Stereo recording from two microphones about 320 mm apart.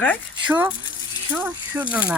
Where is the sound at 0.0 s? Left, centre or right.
Centre.